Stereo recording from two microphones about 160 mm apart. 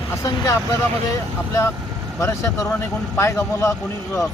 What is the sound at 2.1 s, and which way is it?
Speech, 20° left (ahead or behind).